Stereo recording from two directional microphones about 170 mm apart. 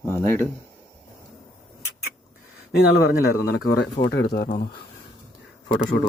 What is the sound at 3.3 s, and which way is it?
Speech, 70° left (ahead or behind).